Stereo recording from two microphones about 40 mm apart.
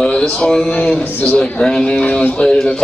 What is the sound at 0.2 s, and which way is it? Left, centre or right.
Speech, centre.